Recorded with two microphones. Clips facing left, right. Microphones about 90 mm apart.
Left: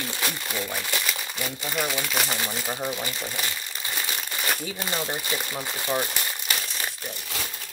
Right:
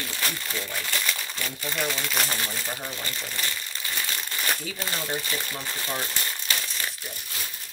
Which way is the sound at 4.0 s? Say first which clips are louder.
Left 1 dB; 15° left (ahead or behind).